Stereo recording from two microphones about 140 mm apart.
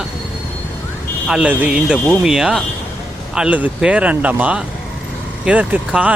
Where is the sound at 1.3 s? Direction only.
10° right (ahead or behind).